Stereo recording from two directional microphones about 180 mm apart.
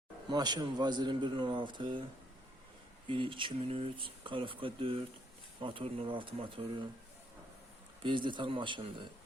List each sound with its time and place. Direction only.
0.3 s speech: 25° right (ahead or behind)
3.1 s speech: 30° right (ahead or behind)
8.0 s speech: 25° right (ahead or behind)